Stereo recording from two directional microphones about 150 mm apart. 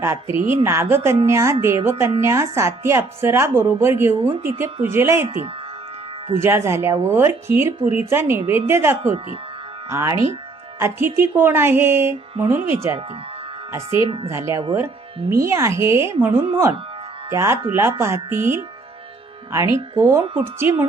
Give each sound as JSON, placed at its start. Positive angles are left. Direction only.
{"t": 0.0, "sound": "speech", "side_deg": -15}
{"t": 17.3, "sound": "speech", "side_deg": -15}